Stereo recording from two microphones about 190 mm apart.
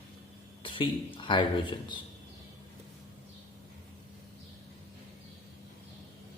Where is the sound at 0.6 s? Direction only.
25° left (ahead or behind).